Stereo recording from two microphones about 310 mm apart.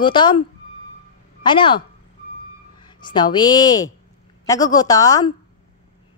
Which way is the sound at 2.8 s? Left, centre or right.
Centre.